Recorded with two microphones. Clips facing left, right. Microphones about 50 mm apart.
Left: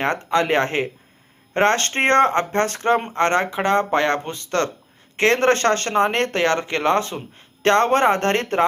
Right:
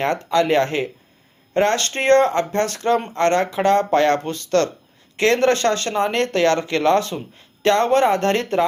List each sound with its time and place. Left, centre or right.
0.0 s speech: left
7.3 s speech: left